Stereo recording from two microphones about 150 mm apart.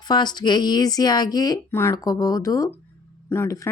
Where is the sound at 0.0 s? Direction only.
30° left (ahead or behind).